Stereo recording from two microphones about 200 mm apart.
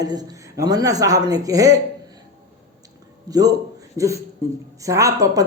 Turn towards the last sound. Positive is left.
turn(degrees=-15)  # may be behind; listen again after turning